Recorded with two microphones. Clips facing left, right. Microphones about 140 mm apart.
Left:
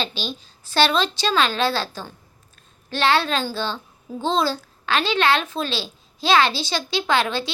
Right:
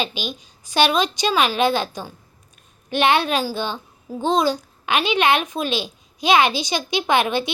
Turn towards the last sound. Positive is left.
turn(degrees=-20)  # may be behind; listen again after turning